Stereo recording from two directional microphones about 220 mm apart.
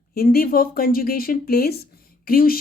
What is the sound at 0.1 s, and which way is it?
Speech, 40° left (ahead or behind).